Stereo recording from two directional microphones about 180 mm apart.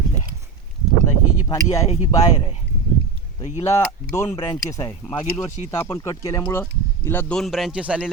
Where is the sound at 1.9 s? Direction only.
35° left (ahead or behind).